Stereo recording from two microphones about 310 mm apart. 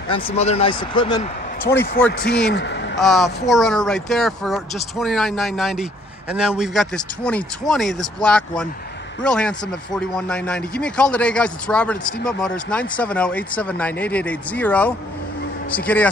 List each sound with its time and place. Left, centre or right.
0.1 s speech: centre
2.5 s speech: left
3.0 s a man's voice: centre